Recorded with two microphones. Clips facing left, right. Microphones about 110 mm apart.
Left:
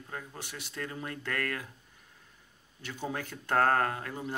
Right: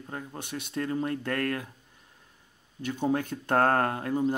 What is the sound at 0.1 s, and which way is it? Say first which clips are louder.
A man's voice: right 5 dB; 35° right (ahead or behind).